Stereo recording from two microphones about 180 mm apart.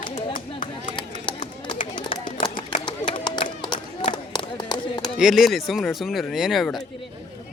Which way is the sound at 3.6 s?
25° left (ahead or behind).